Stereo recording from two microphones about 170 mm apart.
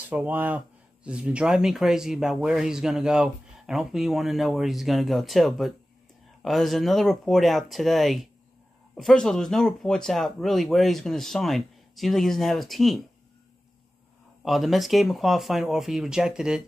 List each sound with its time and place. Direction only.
0.1 s speech: 10° right (ahead or behind)
14.4 s speech: centre (ahead or behind)